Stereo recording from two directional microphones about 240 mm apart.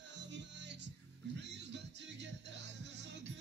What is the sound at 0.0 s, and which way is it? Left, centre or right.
Music, right.